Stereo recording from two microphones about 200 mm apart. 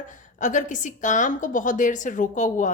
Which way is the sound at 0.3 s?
40° left (ahead or behind).